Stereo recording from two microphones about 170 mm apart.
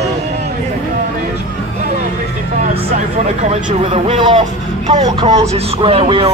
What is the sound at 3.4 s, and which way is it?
Speech, 40° right (ahead or behind).